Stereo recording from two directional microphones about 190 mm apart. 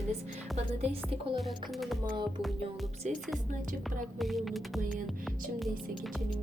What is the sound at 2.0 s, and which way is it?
Speech, 25° right (ahead or behind).